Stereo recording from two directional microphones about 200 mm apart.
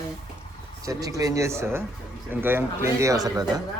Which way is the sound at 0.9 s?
15° right (ahead or behind).